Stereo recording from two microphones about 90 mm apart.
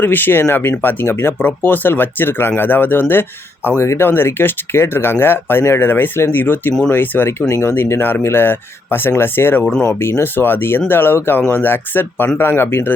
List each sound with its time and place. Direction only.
0.0 s speech: 20° left (ahead or behind)